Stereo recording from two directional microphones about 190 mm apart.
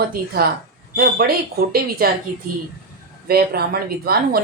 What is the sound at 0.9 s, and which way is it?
Speech, 50° right (ahead or behind).